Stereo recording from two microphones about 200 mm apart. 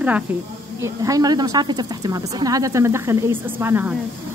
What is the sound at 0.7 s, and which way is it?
A woman's voice, 15° right (ahead or behind).